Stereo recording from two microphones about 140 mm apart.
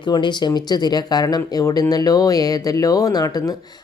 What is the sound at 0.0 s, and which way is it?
Speech, 35° left (ahead or behind).